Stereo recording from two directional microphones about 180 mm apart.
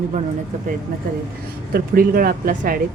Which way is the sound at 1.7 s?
50° right (ahead or behind).